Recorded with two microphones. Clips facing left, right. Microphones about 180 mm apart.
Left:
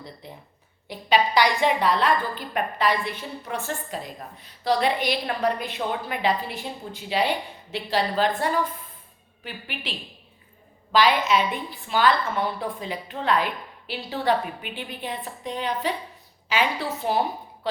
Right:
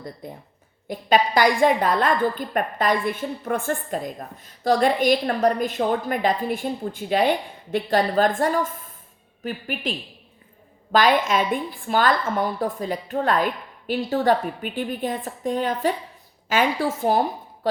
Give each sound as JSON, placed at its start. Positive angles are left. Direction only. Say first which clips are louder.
{"t": 0.2, "sound": "a woman's voice", "louder": "right 5 dB", "side_deg": -50}
{"t": 10.9, "sound": "a woman's voice", "louder": "right 2 dB", "side_deg": -50}